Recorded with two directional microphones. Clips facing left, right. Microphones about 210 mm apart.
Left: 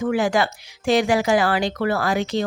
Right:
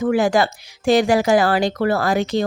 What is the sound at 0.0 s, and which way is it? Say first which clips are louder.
Speech: right 3 dB; 40° right (ahead or behind).